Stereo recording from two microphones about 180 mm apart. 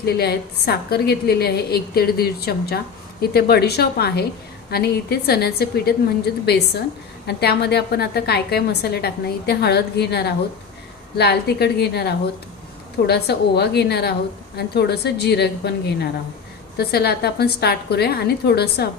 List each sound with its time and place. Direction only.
0.0 s a woman's voice: 60° left (ahead or behind)